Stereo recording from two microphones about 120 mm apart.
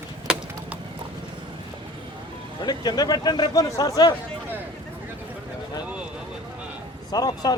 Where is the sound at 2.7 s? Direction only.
35° left (ahead or behind).